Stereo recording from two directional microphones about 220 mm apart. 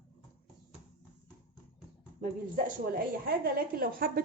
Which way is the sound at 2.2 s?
40° right (ahead or behind).